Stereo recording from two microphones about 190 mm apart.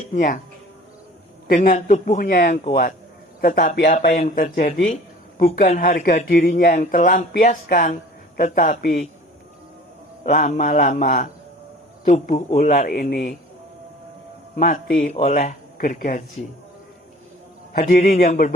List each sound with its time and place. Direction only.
0.1 s speech: 45° left (ahead or behind)
1.5 s a man's voice: 45° left (ahead or behind)
10.2 s speech: 40° left (ahead or behind)
14.5 s speech: 45° left (ahead or behind)
17.7 s speech: 45° left (ahead or behind)